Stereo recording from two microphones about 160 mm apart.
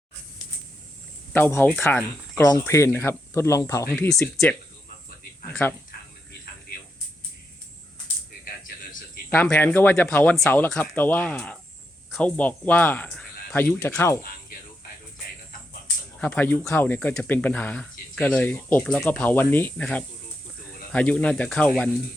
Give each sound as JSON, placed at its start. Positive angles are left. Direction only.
{"t": 1.3, "sound": "speech", "side_deg": 15}
{"t": 3.9, "sound": "speech", "side_deg": 10}
{"t": 5.6, "sound": "speech", "side_deg": 15}
{"t": 6.7, "sound": "a sound", "side_deg": 75}
{"t": 9.3, "sound": "speech", "side_deg": 10}
{"t": 16.2, "sound": "speech", "side_deg": 10}